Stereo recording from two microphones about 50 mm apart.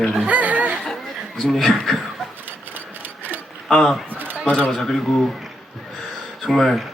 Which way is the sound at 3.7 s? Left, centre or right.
Centre.